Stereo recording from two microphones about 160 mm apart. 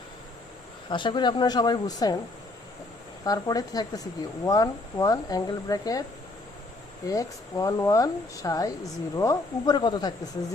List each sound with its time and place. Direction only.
0.9 s speech: 30° left (ahead or behind)
3.2 s speech: 25° left (ahead or behind)
7.1 s speech: 20° left (ahead or behind)